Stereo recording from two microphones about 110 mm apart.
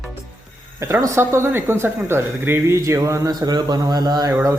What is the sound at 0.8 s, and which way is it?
Speech, 25° right (ahead or behind).